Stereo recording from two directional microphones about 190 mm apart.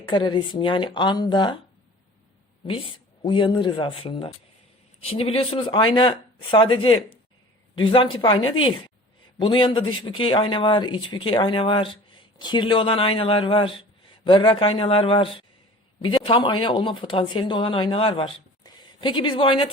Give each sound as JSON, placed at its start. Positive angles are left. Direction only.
{"t": 0.1, "sound": "speech", "side_deg": 25}
{"t": 2.6, "sound": "speech", "side_deg": 30}
{"t": 9.4, "sound": "speech", "side_deg": 25}